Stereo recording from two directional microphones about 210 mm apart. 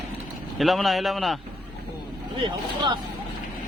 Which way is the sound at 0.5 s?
Centre (ahead or behind).